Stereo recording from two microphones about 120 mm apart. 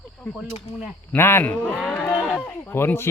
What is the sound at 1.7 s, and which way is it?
Speech, centre (ahead or behind).